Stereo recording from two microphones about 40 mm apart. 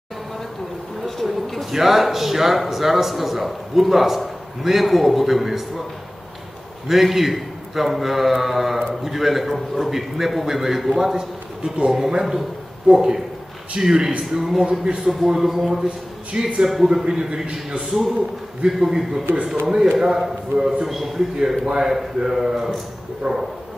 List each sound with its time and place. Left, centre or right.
1.0 s a sound: centre
1.7 s a man's voice: centre
6.9 s a man's voice: centre
12.8 s a man's voice: right
14.6 s speech: right
15.2 s a man's voice: centre
16.3 s speech: right
16.6 s a man's voice: centre